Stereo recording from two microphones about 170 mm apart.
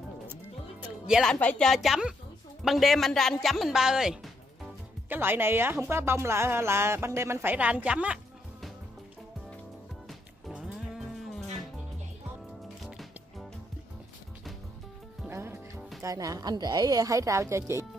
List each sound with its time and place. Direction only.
0.8 s a woman's voice: 5° right (ahead or behind)
10.0 s music: centre (ahead or behind)
12.8 s music: centre (ahead or behind)
15.2 s music: 15° right (ahead or behind)
16.0 s a woman's voice: 20° right (ahead or behind)